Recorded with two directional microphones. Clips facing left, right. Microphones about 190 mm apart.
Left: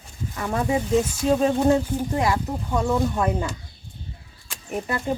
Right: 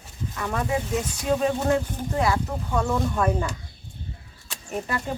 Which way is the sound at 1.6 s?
10° left (ahead or behind).